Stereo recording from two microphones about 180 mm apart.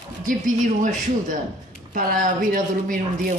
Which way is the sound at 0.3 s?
45° right (ahead or behind).